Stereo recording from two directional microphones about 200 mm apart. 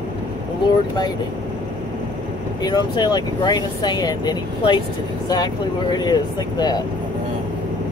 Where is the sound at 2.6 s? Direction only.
20° left (ahead or behind).